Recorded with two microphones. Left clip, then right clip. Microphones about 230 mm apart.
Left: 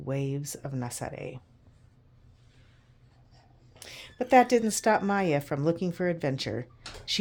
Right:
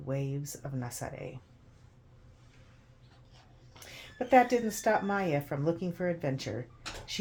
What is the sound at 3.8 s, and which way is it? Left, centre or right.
Speech, left.